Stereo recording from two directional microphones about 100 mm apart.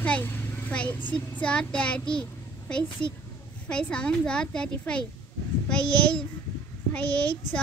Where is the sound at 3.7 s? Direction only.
10° left (ahead or behind).